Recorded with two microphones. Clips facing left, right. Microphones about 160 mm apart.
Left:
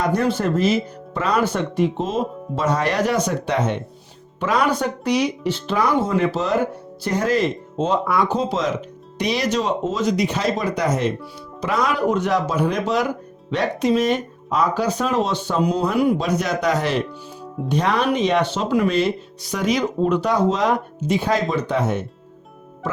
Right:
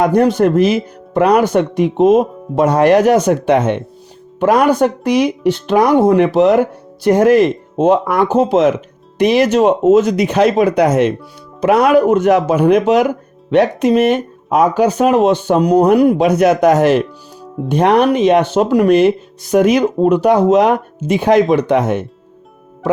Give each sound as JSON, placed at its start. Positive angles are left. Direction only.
{"t": 0.0, "sound": "speech", "side_deg": -65}
{"t": 9.1, "sound": "speech", "side_deg": -50}
{"t": 17.7, "sound": "speech", "side_deg": -60}